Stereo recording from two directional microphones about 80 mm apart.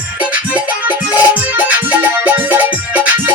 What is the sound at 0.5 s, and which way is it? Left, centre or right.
Music, right.